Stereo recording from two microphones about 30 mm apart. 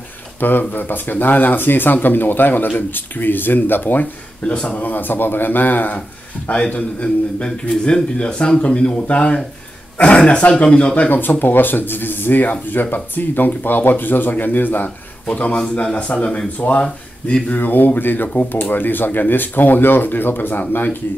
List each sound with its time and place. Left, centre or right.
0.4 s speech: left
4.5 s a man's voice: left
4.7 s speech: left
6.6 s a man's voice: left
10.0 s a man's voice: left
11.1 s speech: left
15.2 s a man's voice: left
15.7 s speech: left
16.5 s speech: left
17.6 s speech: left